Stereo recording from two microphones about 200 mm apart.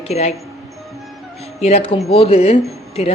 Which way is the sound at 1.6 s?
30° left (ahead or behind).